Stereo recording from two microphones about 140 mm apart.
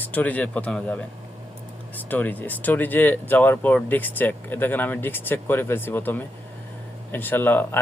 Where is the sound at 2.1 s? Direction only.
10° left (ahead or behind).